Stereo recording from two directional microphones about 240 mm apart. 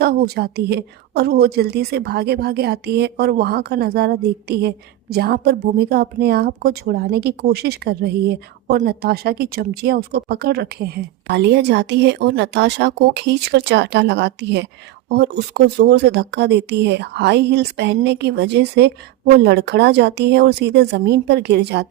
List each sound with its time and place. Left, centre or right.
0.0 s a woman's voice: right